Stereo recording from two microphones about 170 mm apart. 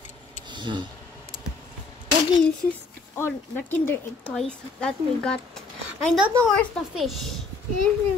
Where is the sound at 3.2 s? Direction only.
10° left (ahead or behind).